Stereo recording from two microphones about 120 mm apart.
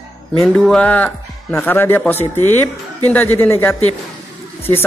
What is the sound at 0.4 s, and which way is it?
Speech, 5° left (ahead or behind).